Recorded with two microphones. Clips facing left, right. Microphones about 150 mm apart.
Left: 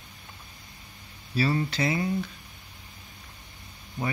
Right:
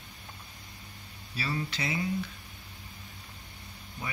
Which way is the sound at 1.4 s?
40° left (ahead or behind).